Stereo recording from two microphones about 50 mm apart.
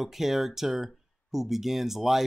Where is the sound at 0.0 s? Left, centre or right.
Centre.